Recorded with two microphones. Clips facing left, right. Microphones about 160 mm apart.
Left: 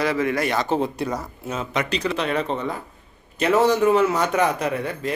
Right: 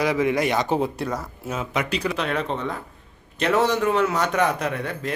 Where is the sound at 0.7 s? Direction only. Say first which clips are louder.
Left 1 dB; centre (ahead or behind).